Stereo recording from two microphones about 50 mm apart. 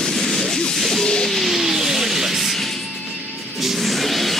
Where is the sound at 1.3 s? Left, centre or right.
Centre.